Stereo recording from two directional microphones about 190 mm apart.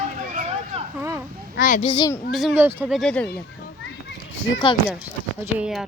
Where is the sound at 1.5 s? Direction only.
45° left (ahead or behind).